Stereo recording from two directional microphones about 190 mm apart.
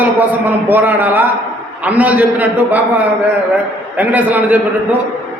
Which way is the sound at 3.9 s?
10° right (ahead or behind).